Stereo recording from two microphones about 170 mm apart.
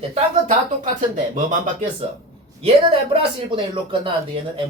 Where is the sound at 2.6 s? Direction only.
35° right (ahead or behind).